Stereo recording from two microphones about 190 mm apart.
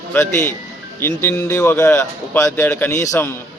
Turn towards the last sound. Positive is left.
turn(degrees=15)  # may be behind; listen again after turning